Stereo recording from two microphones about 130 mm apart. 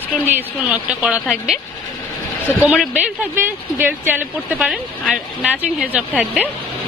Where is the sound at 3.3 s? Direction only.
15° right (ahead or behind).